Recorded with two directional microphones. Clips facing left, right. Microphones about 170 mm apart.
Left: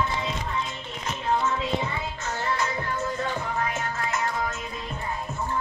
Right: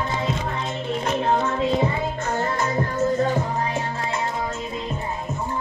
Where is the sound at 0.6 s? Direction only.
55° right (ahead or behind); by 4.8 s 30° right (ahead or behind).